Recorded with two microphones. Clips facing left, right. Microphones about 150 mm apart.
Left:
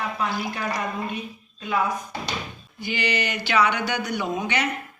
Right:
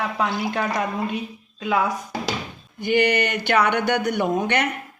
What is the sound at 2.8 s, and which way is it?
Speech, 55° right (ahead or behind).